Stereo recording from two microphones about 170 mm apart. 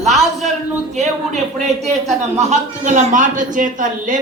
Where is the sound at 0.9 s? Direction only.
40° right (ahead or behind).